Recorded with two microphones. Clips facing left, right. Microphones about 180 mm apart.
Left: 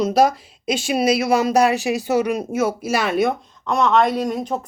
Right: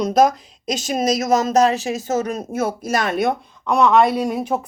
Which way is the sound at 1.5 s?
15° left (ahead or behind).